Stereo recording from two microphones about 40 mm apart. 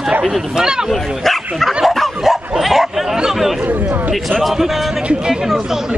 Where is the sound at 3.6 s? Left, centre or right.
Right.